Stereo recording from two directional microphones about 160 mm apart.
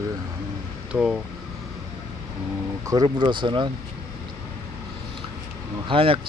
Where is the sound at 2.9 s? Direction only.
25° right (ahead or behind).